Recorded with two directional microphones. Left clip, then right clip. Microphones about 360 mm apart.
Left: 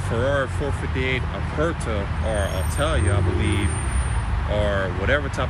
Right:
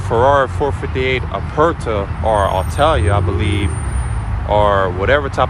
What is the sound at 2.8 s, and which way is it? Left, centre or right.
Speech, centre.